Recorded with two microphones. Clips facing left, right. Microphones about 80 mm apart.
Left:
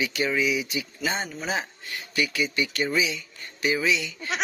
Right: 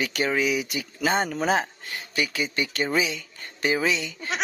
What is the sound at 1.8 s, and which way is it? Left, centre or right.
Speech, right.